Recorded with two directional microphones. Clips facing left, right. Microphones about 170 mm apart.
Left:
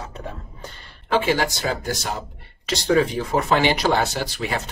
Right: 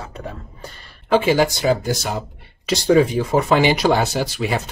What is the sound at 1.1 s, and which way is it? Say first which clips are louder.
Speech: right 5 dB; 10° right (ahead or behind).